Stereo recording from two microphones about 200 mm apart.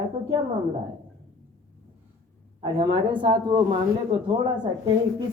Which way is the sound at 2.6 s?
25° right (ahead or behind).